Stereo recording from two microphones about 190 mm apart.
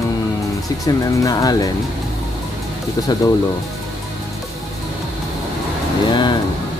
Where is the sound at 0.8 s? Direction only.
20° left (ahead or behind).